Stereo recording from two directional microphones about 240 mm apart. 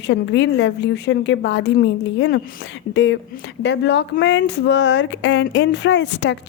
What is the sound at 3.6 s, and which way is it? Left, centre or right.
Speech, left.